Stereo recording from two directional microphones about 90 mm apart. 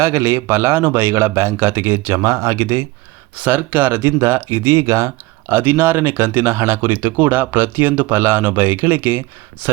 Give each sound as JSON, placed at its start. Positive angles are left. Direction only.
{"t": 0.0, "sound": "speech", "side_deg": -30}
{"t": 3.3, "sound": "speech", "side_deg": -20}